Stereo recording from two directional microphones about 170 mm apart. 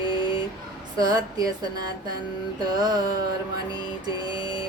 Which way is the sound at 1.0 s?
20° right (ahead or behind).